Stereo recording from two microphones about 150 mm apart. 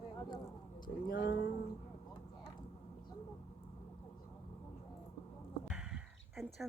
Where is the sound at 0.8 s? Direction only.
75° left (ahead or behind).